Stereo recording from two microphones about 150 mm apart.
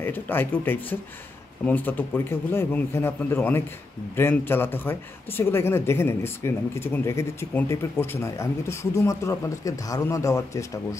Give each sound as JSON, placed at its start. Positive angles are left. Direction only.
{"t": 0.0, "sound": "speech", "side_deg": 15}